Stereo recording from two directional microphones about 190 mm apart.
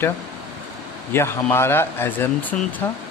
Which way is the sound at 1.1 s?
10° left (ahead or behind).